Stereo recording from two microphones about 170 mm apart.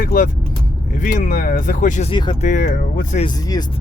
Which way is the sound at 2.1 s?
25° left (ahead or behind).